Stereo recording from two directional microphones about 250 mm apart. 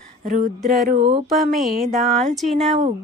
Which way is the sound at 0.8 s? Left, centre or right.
Right.